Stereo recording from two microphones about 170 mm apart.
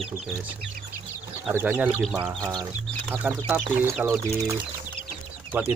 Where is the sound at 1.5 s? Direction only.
10° right (ahead or behind).